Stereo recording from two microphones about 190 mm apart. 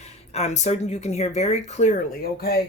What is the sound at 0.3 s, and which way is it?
Speech, 35° left (ahead or behind).